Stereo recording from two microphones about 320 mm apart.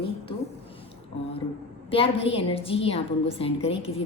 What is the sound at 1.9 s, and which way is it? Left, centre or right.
A woman's voice, centre.